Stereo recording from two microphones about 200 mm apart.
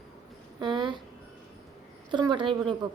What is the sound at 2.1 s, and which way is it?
Speech, 25° right (ahead or behind).